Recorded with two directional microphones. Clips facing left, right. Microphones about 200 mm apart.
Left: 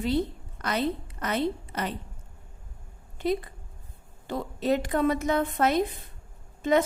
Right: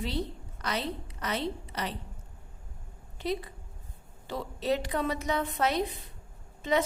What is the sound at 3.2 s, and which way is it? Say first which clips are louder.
A woman's voice: left 5 dB; 50° left (ahead or behind).